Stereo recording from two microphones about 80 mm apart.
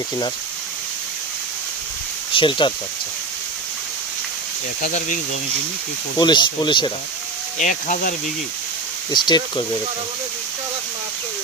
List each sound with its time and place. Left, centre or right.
2.3 s speech: left
6.1 s speech: left
9.1 s speech: left